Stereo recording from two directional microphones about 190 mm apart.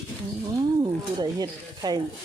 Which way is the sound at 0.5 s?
20° right (ahead or behind).